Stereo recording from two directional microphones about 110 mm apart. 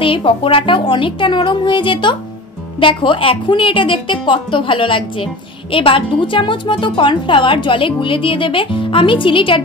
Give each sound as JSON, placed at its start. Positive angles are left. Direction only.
{"t": 0.0, "sound": "a woman's voice", "side_deg": 55}